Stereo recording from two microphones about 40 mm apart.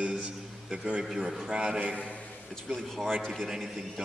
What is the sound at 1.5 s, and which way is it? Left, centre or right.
Speech, centre.